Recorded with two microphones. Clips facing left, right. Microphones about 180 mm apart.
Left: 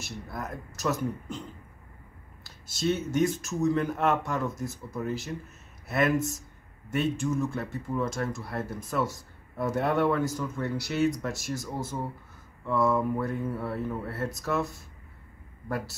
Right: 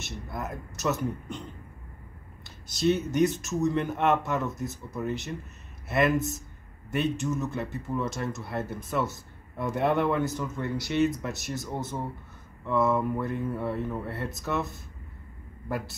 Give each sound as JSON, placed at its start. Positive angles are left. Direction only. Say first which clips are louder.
{"t": 0.4, "sound": "speech", "louder": "even", "side_deg": 0}
{"t": 2.7, "sound": "speech", "louder": "right 2 dB", "side_deg": 0}